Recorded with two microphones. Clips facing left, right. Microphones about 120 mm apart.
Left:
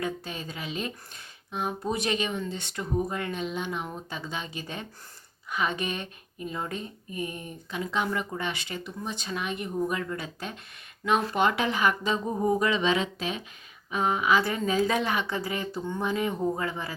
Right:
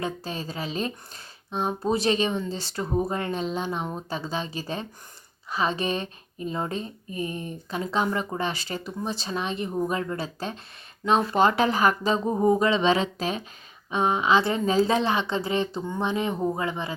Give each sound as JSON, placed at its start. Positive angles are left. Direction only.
{"t": 0.0, "sound": "speech", "side_deg": -35}
{"t": 13.9, "sound": "speech", "side_deg": -25}